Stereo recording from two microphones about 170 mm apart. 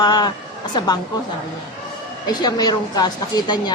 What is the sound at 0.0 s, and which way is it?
Speech, 25° left (ahead or behind).